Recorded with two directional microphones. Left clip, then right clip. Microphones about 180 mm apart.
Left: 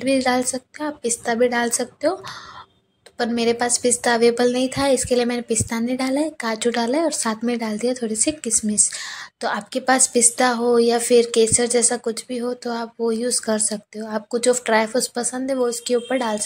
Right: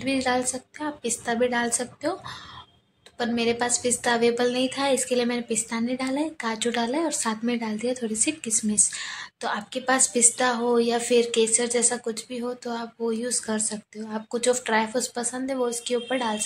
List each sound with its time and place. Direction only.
0.0 s a woman's voice: 20° left (ahead or behind)
3.2 s a woman's voice: 25° left (ahead or behind)